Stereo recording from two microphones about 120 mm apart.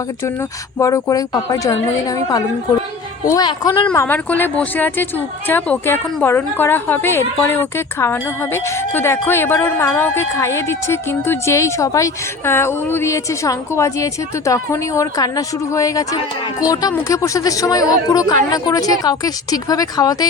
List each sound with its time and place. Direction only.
0.8 s a woman's voice: 25° left (ahead or behind)
3.9 s a woman's voice: 15° left (ahead or behind); by 20.2 s 30° left (ahead or behind)